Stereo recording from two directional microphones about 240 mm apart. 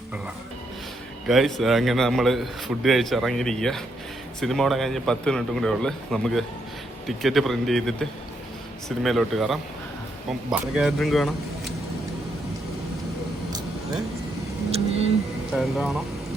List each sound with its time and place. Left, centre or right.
1.3 s a man's voice: centre
9.0 s a man's voice: centre
14.7 s a sound: right
15.5 s a man's voice: centre